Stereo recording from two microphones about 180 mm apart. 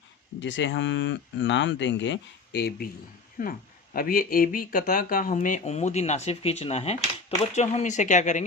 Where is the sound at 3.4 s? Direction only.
50° left (ahead or behind).